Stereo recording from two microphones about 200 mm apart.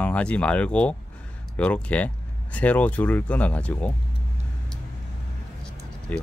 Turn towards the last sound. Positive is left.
turn(degrees=10)  # may be behind; listen again after turning